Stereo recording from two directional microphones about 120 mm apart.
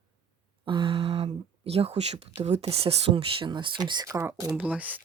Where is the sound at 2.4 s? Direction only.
60° right (ahead or behind); by 4.6 s 25° right (ahead or behind).